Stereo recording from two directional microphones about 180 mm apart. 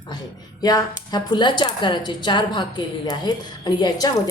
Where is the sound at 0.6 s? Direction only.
20° left (ahead or behind).